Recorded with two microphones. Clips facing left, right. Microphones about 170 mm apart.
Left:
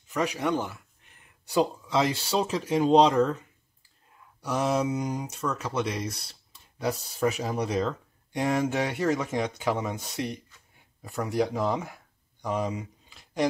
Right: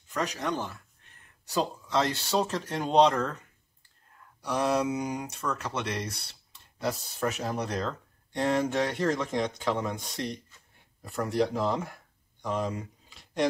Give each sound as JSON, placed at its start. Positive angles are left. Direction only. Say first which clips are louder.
{"t": 0.1, "sound": "speech", "louder": "left 4 dB", "side_deg": 10}
{"t": 4.4, "sound": "speech", "louder": "left 1 dB", "side_deg": 5}